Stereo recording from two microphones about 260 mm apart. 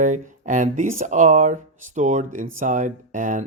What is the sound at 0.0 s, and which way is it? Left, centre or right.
Speech, right.